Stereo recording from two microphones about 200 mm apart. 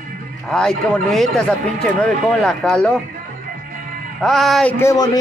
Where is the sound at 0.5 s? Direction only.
5° left (ahead or behind).